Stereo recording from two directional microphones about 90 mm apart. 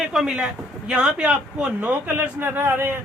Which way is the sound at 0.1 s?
5° right (ahead or behind).